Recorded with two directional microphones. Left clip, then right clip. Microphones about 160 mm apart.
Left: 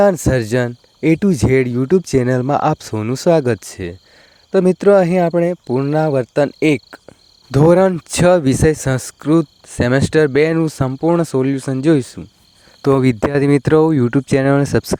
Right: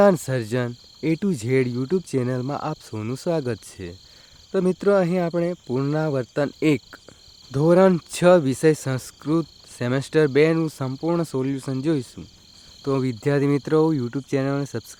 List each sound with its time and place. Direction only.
0.0 s speech: 35° left (ahead or behind)
5.6 s speech: 25° left (ahead or behind)
7.5 s speech: 45° left (ahead or behind)
12.8 s speech: 55° left (ahead or behind)